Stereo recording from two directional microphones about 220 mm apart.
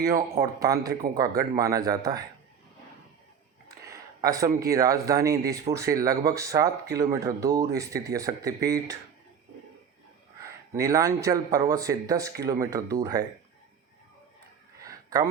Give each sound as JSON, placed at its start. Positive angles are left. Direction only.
{"t": 0.0, "sound": "speech", "side_deg": -15}
{"t": 3.7, "sound": "speech", "side_deg": -15}
{"t": 10.8, "sound": "speech", "side_deg": -15}
{"t": 14.8, "sound": "a sound", "side_deg": -15}